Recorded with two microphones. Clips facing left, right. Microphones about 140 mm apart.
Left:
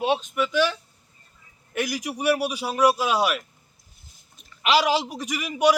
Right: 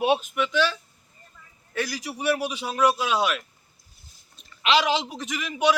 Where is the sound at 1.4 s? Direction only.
90° right.